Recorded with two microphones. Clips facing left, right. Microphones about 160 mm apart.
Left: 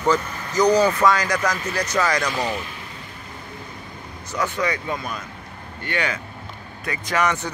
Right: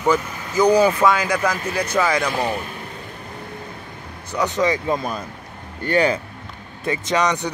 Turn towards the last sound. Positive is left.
turn(degrees=-15)  # may be behind; listen again after turning